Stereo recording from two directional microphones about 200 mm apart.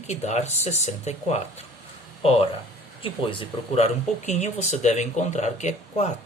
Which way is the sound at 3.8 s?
35° left (ahead or behind).